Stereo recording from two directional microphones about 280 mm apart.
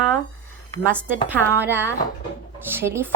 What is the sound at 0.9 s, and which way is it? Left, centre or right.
A woman's voice, centre.